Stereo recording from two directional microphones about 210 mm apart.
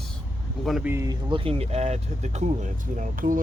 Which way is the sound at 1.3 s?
25° right (ahead or behind).